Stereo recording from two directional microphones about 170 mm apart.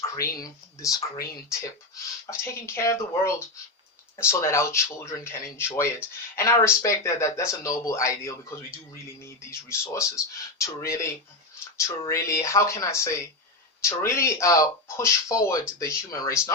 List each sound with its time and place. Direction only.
0.1 s speech: 20° left (ahead or behind)